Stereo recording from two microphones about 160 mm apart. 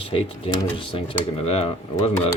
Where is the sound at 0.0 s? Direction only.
35° left (ahead or behind).